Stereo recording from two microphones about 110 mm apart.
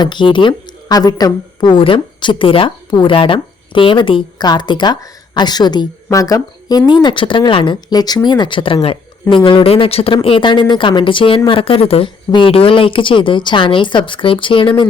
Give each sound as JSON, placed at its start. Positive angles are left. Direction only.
{"t": 0.0, "sound": "a woman's voice", "side_deg": 45}